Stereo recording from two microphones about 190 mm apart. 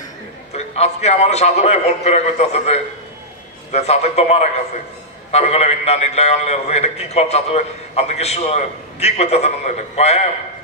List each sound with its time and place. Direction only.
0.5 s a man's voice: 35° left (ahead or behind)